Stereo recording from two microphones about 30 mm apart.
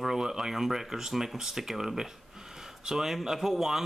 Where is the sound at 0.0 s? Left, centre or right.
Centre.